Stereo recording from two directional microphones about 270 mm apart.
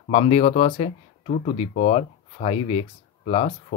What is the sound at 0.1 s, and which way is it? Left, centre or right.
Speech, left.